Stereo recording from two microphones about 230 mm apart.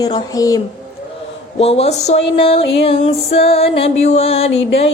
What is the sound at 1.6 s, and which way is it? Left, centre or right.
Music, left.